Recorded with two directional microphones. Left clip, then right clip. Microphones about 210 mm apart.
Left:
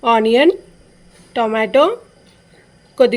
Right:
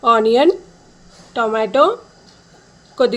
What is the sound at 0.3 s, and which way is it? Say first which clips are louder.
Speech: even; 20° left (ahead or behind).